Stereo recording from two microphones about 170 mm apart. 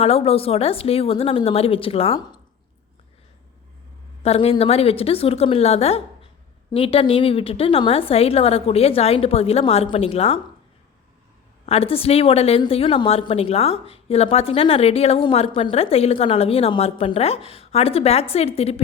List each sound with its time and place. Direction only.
0.0 s a woman's voice: 35° left (ahead or behind)
4.2 s a woman's voice: 35° left (ahead or behind)
11.6 s a woman's voice: 35° left (ahead or behind)